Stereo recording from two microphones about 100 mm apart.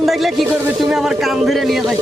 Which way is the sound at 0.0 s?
Centre (ahead or behind).